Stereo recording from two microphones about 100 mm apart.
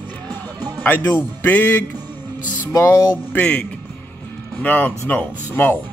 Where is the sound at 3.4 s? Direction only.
10° left (ahead or behind).